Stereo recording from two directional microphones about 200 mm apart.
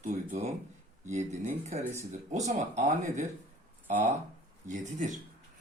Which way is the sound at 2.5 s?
35° right (ahead or behind).